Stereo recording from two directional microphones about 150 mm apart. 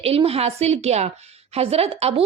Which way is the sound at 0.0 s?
40° right (ahead or behind).